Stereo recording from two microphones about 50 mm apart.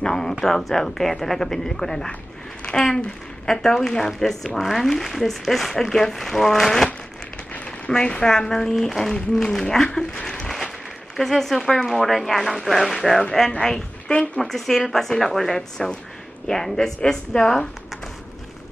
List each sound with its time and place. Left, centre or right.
0.0 s speech: centre
7.5 s a sound: left
7.9 s speech: centre
14.4 s speech: centre